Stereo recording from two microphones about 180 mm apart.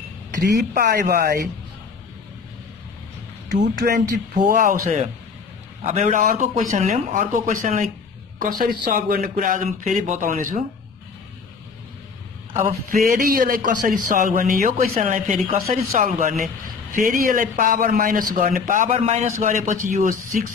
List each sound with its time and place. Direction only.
0.7 s speech: 55° right (ahead or behind)
3.8 s a man's voice: 50° right (ahead or behind)
12.9 s a man's voice: 50° right (ahead or behind)
18.9 s a man's voice: 35° right (ahead or behind)